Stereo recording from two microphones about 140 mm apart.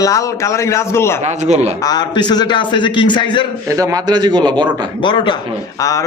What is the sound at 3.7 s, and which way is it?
A man's voice, 25° right (ahead or behind).